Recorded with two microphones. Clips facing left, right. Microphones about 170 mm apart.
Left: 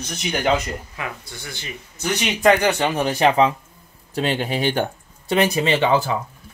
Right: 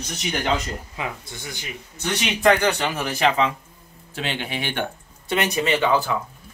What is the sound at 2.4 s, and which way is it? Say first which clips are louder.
A man's voice: left 2 dB; 25° left (ahead or behind).